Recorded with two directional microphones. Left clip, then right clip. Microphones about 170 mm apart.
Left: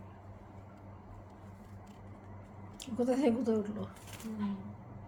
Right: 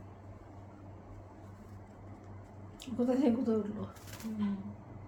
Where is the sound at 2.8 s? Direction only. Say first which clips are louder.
Even; 15° left (ahead or behind).